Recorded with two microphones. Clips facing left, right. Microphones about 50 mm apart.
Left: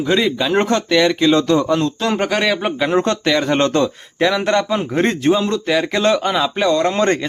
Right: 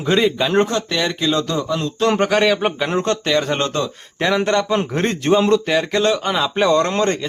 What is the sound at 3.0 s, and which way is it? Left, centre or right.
Speech, left.